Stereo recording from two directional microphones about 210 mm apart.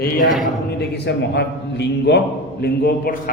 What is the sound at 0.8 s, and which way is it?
A man's voice, 55° left (ahead or behind).